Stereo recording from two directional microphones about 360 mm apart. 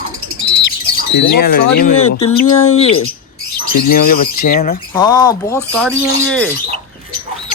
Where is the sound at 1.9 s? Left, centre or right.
Left.